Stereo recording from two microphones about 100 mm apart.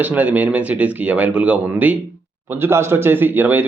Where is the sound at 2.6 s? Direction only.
25° right (ahead or behind).